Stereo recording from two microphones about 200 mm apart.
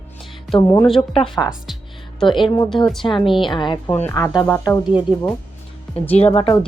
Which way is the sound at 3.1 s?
25° left (ahead or behind).